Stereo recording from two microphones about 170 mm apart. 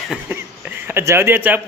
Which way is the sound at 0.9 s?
15° right (ahead or behind).